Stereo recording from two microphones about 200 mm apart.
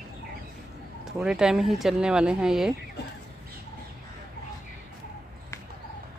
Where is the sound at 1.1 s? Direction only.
5° right (ahead or behind).